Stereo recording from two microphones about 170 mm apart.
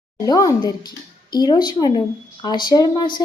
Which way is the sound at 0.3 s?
20° left (ahead or behind).